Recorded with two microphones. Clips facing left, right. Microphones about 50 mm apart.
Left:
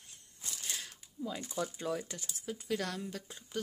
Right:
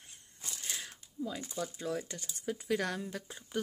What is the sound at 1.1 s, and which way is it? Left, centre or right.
Speech, centre.